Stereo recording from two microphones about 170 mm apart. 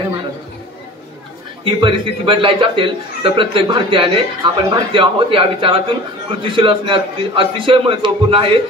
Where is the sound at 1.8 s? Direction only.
30° right (ahead or behind).